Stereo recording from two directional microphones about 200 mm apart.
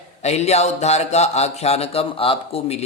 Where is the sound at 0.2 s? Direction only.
35° left (ahead or behind).